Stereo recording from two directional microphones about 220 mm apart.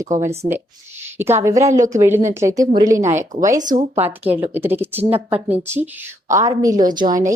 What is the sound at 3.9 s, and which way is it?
A woman's voice, 10° right (ahead or behind).